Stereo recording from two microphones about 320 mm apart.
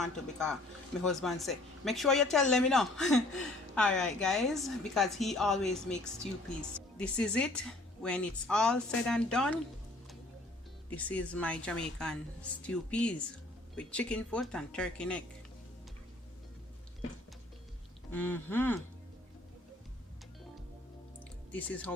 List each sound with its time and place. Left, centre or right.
0.0 s speech: centre
10.8 s speech: centre
18.1 s speech: centre
21.5 s speech: centre